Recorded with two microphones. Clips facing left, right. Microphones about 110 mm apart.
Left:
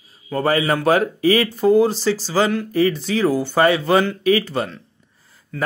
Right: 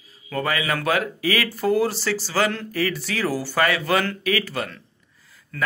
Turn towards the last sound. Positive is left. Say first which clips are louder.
# left 7 dB
turn(degrees=25)  # may be behind; listen again after turning